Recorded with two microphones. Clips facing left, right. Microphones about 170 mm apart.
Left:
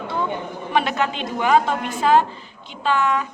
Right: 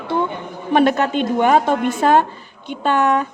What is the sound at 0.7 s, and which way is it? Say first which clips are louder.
A man's voice: right 7 dB; 45° right (ahead or behind).